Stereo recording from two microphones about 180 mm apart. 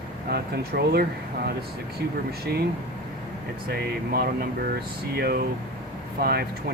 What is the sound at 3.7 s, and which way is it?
Speech, 60° right (ahead or behind).